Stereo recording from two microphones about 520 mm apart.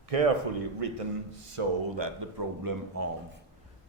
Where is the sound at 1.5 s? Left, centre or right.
Right.